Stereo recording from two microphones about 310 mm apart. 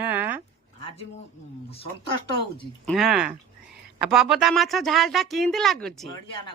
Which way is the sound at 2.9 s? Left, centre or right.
Centre.